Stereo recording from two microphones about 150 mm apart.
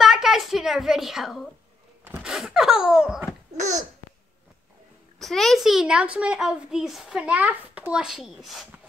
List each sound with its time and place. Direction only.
0.0 s a sound: centre (ahead or behind)
3.5 s babbling: 55° right (ahead or behind)
5.2 s speech: centre (ahead or behind)